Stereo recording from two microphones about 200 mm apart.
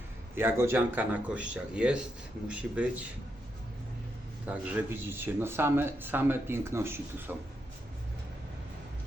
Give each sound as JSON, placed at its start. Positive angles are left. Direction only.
{"t": 0.3, "sound": "speech", "side_deg": -10}
{"t": 4.4, "sound": "speech", "side_deg": -10}